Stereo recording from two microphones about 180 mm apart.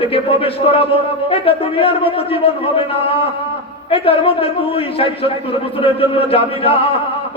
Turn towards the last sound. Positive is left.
turn(degrees=30)  # may be behind; listen again after turning